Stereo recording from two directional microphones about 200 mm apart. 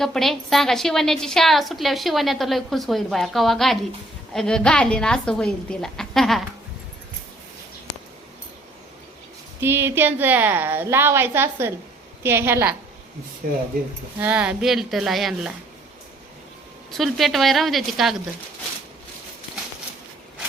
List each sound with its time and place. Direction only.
0.0 s a woman's voice: centre (ahead or behind)
9.6 s a woman's voice: 10° right (ahead or behind)
13.4 s speech: 45° right (ahead or behind)
14.2 s a woman's voice: 5° right (ahead or behind)
16.9 s a woman's voice: centre (ahead or behind)